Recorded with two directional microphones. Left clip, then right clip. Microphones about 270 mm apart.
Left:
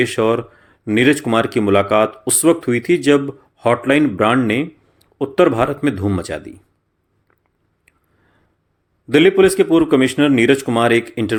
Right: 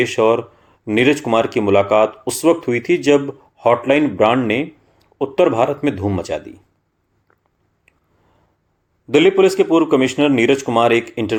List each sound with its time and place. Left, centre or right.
0.0 s speech: left
9.0 s speech: left